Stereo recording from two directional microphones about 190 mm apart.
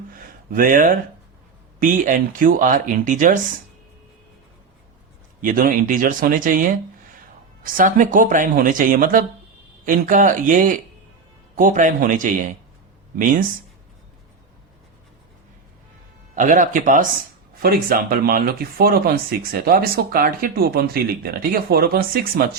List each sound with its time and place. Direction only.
0.1 s a sound: 45° right (ahead or behind)
1.8 s speech: 45° right (ahead or behind)
5.4 s speech: 45° right (ahead or behind)
16.3 s speech: 40° right (ahead or behind)